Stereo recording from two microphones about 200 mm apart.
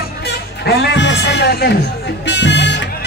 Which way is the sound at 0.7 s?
55° left (ahead or behind).